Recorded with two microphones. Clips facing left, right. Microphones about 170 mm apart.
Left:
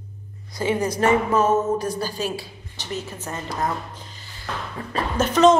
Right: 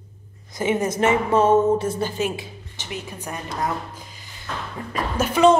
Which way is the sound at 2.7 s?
40° left (ahead or behind).